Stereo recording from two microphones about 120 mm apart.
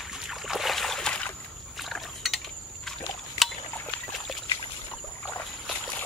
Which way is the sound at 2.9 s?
Centre (ahead or behind).